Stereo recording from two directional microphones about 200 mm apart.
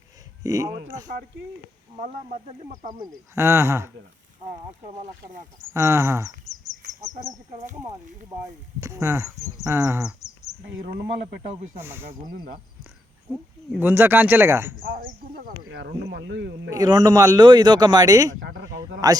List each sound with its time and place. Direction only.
0.4 s speech: 15° right (ahead or behind)
2.0 s speech: 40° right (ahead or behind)
3.0 s speech: 15° right (ahead or behind)
4.9 s speech: 40° right (ahead or behind)
5.7 s speech: 15° right (ahead or behind)
8.8 s speech: 15° right (ahead or behind)
11.3 s speech: 40° right (ahead or behind)
11.8 s speech: 10° right (ahead or behind)
13.3 s speech: 10° right (ahead or behind)
14.9 s speech: 45° right (ahead or behind)
15.8 s speech: 60° right (ahead or behind)
16.7 s speech: 20° right (ahead or behind)
18.3 s speech: 70° right (ahead or behind)
19.0 s speech: 15° right (ahead or behind)